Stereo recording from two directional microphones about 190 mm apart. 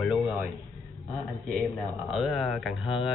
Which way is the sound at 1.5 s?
Centre (ahead or behind).